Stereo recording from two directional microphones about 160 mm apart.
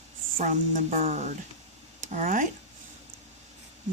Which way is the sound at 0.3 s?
50° right (ahead or behind).